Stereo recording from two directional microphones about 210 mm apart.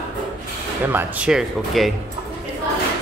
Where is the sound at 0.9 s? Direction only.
10° right (ahead or behind).